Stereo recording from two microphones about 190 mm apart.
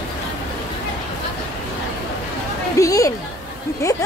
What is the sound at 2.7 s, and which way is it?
Music, 15° left (ahead or behind).